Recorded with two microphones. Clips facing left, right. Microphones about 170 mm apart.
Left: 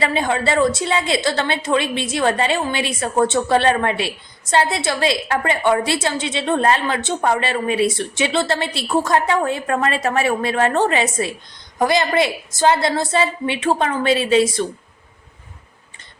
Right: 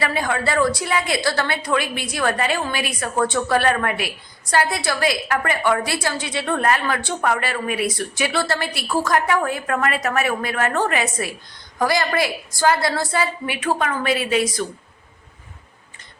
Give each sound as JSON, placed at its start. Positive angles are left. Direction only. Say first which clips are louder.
{"t": 0.0, "sound": "a woman's voice", "louder": "left 3 dB", "side_deg": 25}